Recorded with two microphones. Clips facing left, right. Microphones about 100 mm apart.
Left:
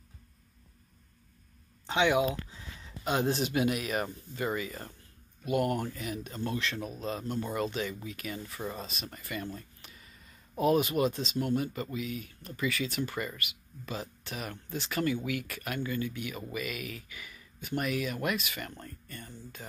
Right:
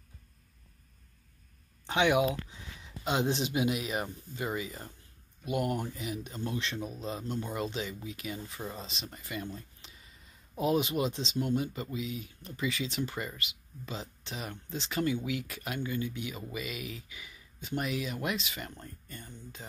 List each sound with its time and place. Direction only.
2.0 s speech: 20° right (ahead or behind)
9.6 s a sound: 20° right (ahead or behind)
10.6 s speech: 20° right (ahead or behind)